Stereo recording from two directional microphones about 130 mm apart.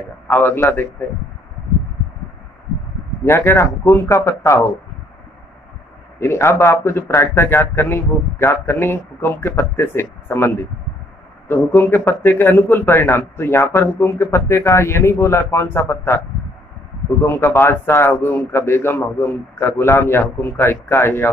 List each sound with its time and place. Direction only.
0.3 s a man's voice: 15° left (ahead or behind)
3.3 s a man's voice: 20° left (ahead or behind)
6.1 s a man's voice: 20° left (ahead or behind)
11.7 s a man's voice: 15° left (ahead or behind)
17.2 s a man's voice: 20° left (ahead or behind)